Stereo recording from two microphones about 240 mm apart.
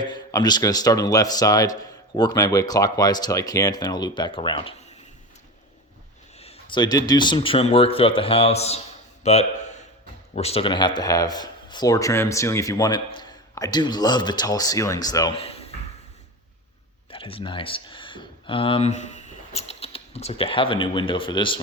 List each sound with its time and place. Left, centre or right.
0.0 s speech: centre
6.3 s a man's voice: left
17.1 s speech: left